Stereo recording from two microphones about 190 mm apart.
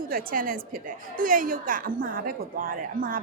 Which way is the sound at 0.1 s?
50° right (ahead or behind).